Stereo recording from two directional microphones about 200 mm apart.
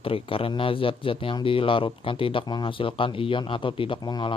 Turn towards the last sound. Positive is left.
turn(degrees=20)  # may be behind; listen again after turning